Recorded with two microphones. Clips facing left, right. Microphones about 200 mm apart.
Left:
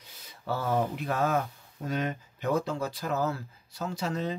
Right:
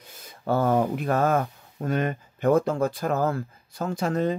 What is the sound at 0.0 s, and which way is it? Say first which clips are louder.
Speech: right 8 dB; 50° right (ahead or behind).